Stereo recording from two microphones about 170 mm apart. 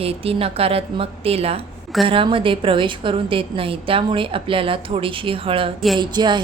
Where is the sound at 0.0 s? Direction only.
35° right (ahead or behind).